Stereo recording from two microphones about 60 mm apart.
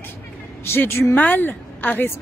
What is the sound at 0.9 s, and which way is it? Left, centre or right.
Speech, left.